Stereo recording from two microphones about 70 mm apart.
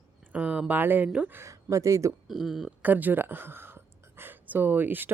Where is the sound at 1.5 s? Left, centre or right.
Right.